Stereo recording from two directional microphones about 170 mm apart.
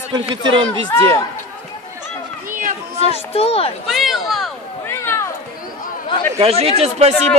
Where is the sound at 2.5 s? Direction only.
55° right (ahead or behind).